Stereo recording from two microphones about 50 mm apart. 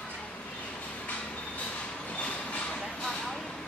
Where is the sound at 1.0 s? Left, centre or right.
Left.